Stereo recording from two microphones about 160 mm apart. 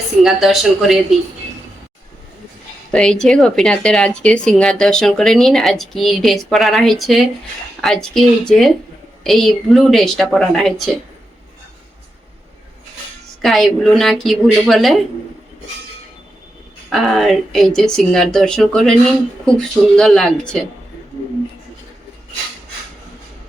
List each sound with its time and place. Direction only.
0.2 s speech: centre (ahead or behind)
2.9 s speech: 5° left (ahead or behind)
13.4 s speech: centre (ahead or behind)
16.9 s speech: centre (ahead or behind)